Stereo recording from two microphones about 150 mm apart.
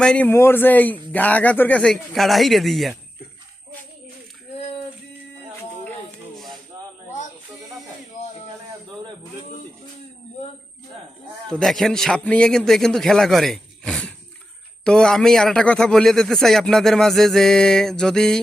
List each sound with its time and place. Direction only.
0.0 s speech: 10° left (ahead or behind)
6.3 s a sound: centre (ahead or behind)
11.4 s a man's voice: 5° left (ahead or behind)